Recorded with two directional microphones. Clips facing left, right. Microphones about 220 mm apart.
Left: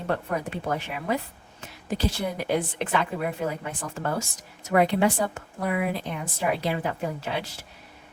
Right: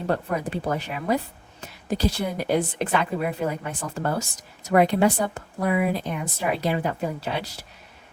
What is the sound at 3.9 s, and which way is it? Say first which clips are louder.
Speech: right 2 dB; 40° right (ahead or behind).